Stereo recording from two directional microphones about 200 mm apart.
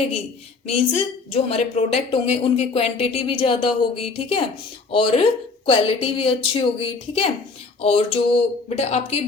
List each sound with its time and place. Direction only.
0.7 s a woman's voice: 30° left (ahead or behind)